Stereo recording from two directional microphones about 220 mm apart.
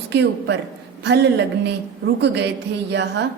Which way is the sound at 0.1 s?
55° right (ahead or behind).